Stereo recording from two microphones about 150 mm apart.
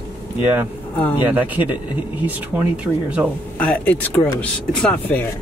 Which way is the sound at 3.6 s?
10° left (ahead or behind).